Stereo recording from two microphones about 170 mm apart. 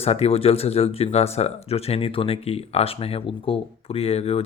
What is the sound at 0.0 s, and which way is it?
Speech, 35° left (ahead or behind).